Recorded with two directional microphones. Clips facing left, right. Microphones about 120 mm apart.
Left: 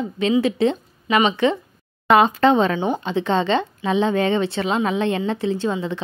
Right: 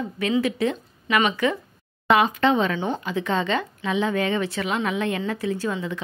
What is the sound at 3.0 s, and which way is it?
Speech, 30° left (ahead or behind).